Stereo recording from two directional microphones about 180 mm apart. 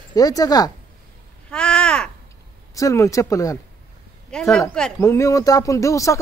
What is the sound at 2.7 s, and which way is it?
Speech, 15° left (ahead or behind).